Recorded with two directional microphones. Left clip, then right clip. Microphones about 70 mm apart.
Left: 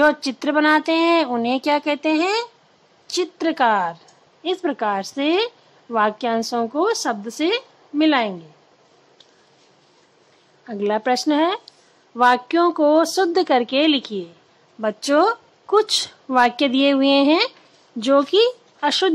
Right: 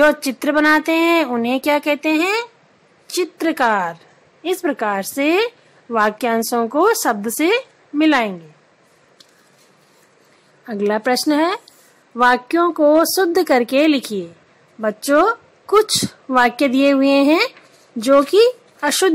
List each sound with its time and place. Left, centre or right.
0.0 s speech: right
3.1 s a woman's voice: right
5.9 s a woman's voice: right
7.2 s a woman's voice: right
10.6 s a woman's voice: right
15.1 s speech: right